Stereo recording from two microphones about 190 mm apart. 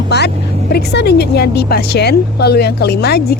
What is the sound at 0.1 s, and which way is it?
A woman's voice, 60° left (ahead or behind).